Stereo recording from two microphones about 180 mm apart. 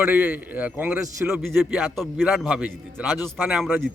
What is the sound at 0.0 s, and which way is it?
A man's voice, 10° right (ahead or behind).